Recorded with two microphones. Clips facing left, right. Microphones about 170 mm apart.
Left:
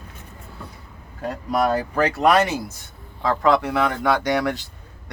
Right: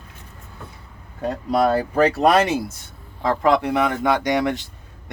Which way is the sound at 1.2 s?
25° right (ahead or behind).